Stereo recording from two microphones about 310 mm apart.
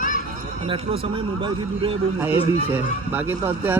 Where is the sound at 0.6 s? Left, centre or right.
Centre.